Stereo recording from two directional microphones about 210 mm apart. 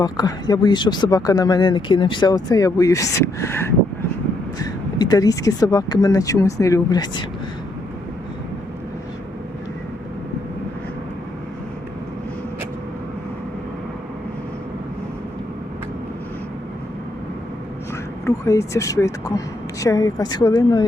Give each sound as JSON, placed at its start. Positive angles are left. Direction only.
{"t": 0.0, "sound": "speech", "side_deg": 20}
{"t": 18.3, "sound": "speech", "side_deg": 15}